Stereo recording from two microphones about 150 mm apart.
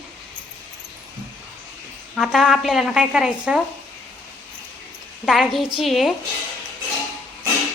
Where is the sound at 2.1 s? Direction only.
Centre (ahead or behind).